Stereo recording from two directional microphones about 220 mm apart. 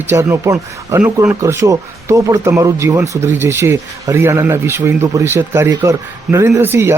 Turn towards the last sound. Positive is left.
turn(degrees=-10)  # may be behind; listen again after turning